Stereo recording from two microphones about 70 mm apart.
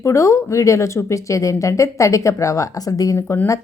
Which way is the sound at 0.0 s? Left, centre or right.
Left.